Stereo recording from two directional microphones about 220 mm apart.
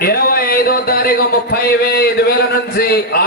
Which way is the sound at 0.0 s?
45° left (ahead or behind).